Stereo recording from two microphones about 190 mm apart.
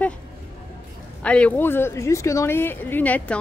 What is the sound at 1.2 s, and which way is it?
Speech, 5° left (ahead or behind).